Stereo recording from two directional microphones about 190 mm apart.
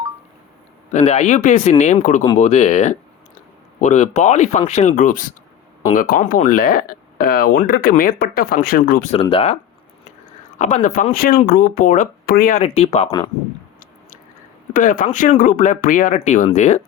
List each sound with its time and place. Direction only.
0.9 s speech: 35° left (ahead or behind)
9.1 s speech: 30° left (ahead or behind)
10.6 s speech: 40° left (ahead or behind)
12.6 s speech: 30° left (ahead or behind)
13.1 s speech: 20° left (ahead or behind)
14.7 s speech: 45° left (ahead or behind)